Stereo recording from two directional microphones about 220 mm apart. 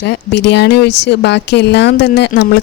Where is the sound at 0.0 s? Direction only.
50° left (ahead or behind).